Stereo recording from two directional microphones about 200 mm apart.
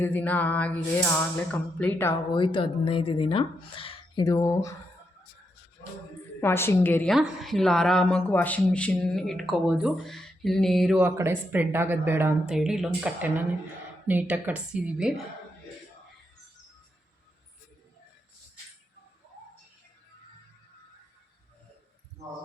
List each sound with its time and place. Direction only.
0.0 s music: 10° left (ahead or behind)
2.3 s speech: 25° left (ahead or behind)
6.4 s a woman's voice: 10° left (ahead or behind); by 15.1 s 5° right (ahead or behind)